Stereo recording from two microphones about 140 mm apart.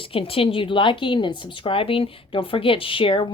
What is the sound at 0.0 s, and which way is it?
A woman's voice, 40° left (ahead or behind).